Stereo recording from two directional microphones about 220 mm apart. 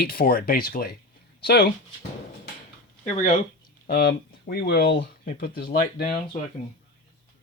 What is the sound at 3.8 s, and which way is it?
Speech, 45° left (ahead or behind).